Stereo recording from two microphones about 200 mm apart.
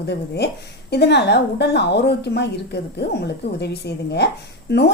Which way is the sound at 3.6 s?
55° left (ahead or behind).